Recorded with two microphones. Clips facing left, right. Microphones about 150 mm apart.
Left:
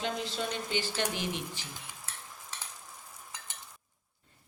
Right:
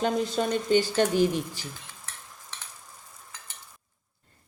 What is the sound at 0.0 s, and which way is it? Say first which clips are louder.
Speech: right 8 dB; 45° right (ahead or behind).